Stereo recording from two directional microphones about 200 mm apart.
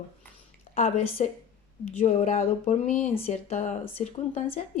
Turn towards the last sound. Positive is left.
turn(degrees=30)  # may be behind; listen again after turning